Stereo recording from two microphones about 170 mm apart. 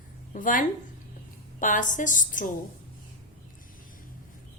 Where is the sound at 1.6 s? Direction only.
50° left (ahead or behind).